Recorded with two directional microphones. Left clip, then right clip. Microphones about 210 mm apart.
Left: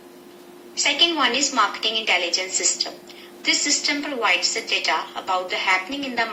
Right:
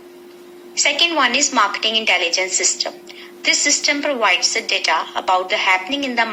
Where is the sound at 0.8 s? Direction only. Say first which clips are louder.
Right 3 dB; 50° right (ahead or behind).